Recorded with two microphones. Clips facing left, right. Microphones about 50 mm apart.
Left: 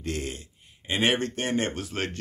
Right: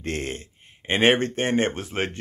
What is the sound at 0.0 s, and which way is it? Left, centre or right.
Speech, right.